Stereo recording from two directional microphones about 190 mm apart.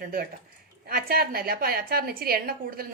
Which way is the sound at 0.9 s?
50° right (ahead or behind).